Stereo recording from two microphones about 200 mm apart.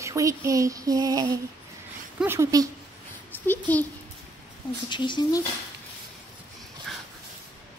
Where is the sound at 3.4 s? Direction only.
10° left (ahead or behind).